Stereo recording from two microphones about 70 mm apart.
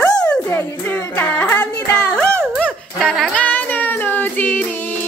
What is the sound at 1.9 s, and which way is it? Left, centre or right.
Music, centre.